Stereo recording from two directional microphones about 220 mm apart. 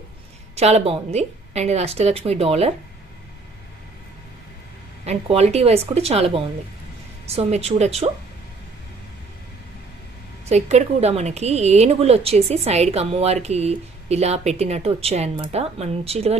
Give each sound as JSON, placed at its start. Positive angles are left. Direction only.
{"t": 0.6, "sound": "speech", "side_deg": -30}
{"t": 5.0, "sound": "speech", "side_deg": -30}
{"t": 10.5, "sound": "speech", "side_deg": -30}